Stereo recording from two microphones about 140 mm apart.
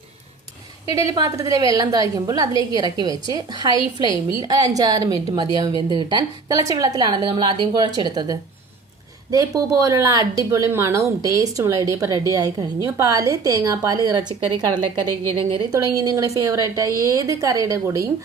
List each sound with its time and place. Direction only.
0.9 s a woman's voice: 25° right (ahead or behind)
9.6 s a woman's voice: 25° right (ahead or behind)